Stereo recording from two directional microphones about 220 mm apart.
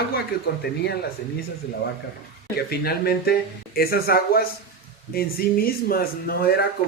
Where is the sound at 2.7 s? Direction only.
45° left (ahead or behind).